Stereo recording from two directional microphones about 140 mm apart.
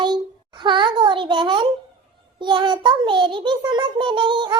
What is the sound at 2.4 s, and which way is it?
A child's voice, 35° right (ahead or behind).